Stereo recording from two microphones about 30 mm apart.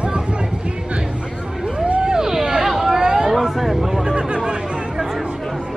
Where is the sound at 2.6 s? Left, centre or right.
Centre.